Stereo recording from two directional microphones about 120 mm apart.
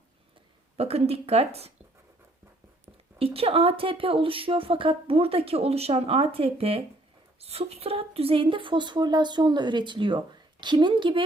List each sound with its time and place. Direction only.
0.8 s speech: 55° right (ahead or behind)
3.2 s a woman's voice: 55° right (ahead or behind)